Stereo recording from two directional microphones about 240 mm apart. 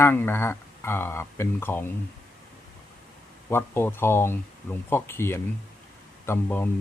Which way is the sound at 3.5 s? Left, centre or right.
Centre.